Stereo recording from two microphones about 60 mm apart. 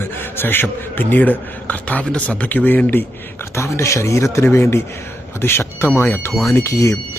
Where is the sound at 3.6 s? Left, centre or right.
Left.